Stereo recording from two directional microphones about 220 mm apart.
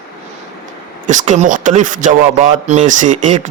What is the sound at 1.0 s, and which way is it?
A man's voice, 35° right (ahead or behind).